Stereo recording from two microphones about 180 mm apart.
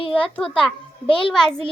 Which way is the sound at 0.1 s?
5° left (ahead or behind).